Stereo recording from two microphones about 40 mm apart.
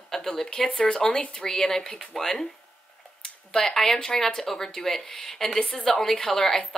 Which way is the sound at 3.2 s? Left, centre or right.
Centre.